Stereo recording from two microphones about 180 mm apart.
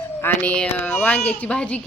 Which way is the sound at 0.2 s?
10° left (ahead or behind).